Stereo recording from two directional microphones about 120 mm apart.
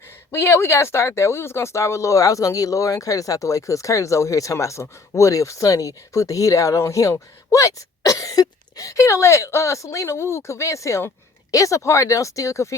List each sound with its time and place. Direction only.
0.3 s speech: 20° left (ahead or behind)